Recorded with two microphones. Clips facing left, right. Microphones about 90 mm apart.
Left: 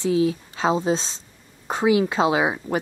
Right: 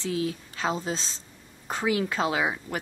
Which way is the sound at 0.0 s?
20° left (ahead or behind).